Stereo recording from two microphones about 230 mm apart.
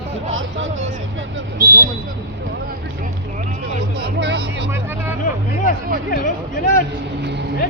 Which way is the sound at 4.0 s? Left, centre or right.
Right.